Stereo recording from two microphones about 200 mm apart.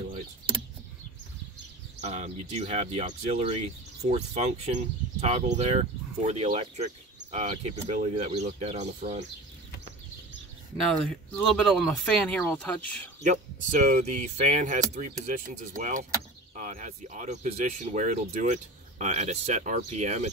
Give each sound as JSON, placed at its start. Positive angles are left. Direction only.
{"t": 2.0, "sound": "speech", "side_deg": -35}
{"t": 11.4, "sound": "speech", "side_deg": 0}
{"t": 13.2, "sound": "speech", "side_deg": -35}